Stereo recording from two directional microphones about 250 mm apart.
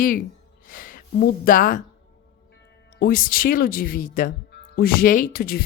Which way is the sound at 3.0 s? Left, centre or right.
Left.